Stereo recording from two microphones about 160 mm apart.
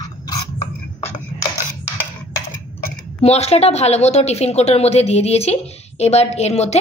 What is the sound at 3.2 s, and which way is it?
Speech, 40° left (ahead or behind).